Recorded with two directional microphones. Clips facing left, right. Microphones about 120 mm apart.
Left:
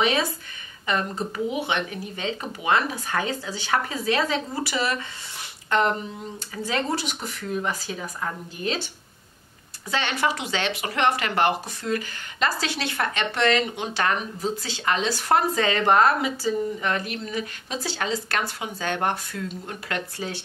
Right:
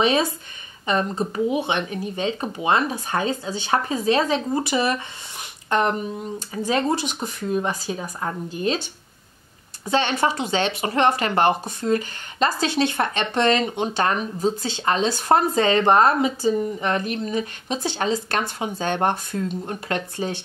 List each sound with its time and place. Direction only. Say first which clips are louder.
0.0 s speech: right 3 dB; 25° right (ahead or behind)
9.8 s speech: right 4 dB; 30° right (ahead or behind)
20.2 s speech: right 5 dB; 20° right (ahead or behind)